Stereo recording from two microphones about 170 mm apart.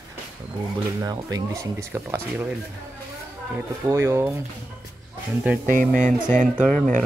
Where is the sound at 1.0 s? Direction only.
20° right (ahead or behind).